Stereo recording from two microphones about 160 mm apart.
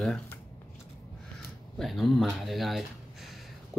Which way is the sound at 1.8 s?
Centre (ahead or behind).